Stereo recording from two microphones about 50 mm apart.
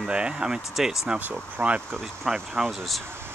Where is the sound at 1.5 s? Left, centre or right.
Right.